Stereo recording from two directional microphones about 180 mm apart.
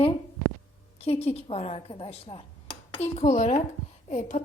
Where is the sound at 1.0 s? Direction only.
35° left (ahead or behind).